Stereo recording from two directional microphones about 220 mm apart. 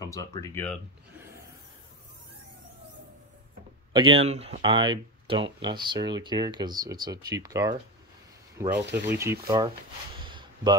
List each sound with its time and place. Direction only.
0.0 s speech: 15° left (ahead or behind)
1.1 s rub: 10° right (ahead or behind)
3.9 s speech: 25° right (ahead or behind)
10.1 s a sound: 20° right (ahead or behind)